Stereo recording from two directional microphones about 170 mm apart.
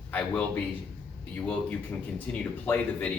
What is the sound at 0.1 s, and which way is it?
A man's voice, 10° left (ahead or behind).